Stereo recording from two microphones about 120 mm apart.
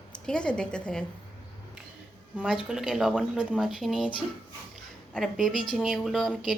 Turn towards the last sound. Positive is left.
turn(degrees=0)  # may be behind; listen again after turning